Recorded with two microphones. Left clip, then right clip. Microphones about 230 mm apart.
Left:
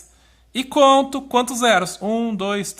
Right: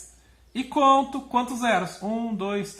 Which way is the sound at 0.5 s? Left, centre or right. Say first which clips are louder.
Left 5 dB; left.